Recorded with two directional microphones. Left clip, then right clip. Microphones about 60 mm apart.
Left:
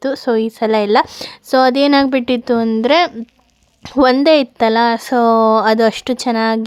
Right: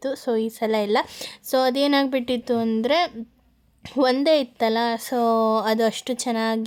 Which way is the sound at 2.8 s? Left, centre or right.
Left.